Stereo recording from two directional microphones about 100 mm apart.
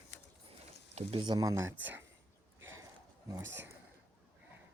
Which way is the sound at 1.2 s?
40° right (ahead or behind).